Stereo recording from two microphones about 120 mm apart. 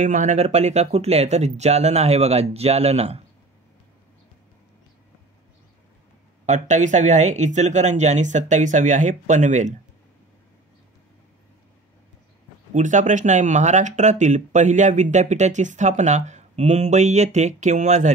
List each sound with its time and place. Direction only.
0.0 s speech: 90° right; by 3.2 s 60° right (ahead or behind)
6.4 s speech: 85° right
12.7 s speech: 90° right